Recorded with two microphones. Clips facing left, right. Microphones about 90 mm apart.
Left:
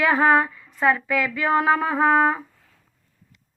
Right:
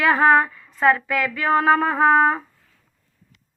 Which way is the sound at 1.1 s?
45° right (ahead or behind).